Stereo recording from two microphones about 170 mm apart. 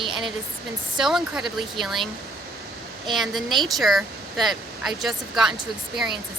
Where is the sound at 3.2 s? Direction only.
Centre (ahead or behind).